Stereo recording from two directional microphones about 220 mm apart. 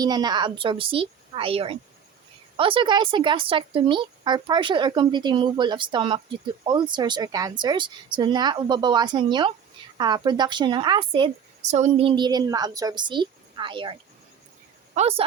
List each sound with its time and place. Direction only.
0.0 s a woman's voice: 20° right (ahead or behind)
14.9 s speech: 30° right (ahead or behind)